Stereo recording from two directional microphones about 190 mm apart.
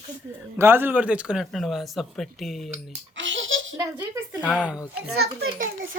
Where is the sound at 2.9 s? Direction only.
80° right.